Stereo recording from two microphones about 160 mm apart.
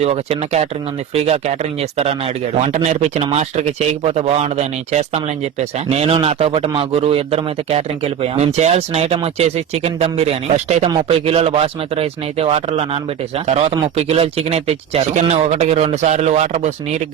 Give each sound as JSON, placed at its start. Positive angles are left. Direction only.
{"t": 0.0, "sound": "speech", "side_deg": -40}
{"t": 10.8, "sound": "speech", "side_deg": -35}